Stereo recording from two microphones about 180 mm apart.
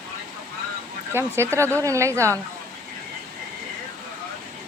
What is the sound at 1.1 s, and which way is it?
Speech, 15° right (ahead or behind).